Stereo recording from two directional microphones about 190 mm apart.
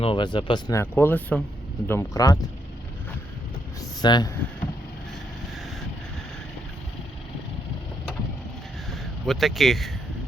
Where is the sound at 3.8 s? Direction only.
20° left (ahead or behind).